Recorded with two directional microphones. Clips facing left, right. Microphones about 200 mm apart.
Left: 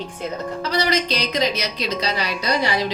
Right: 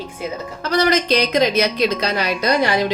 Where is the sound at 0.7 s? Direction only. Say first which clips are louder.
Right 6 dB; 50° right (ahead or behind).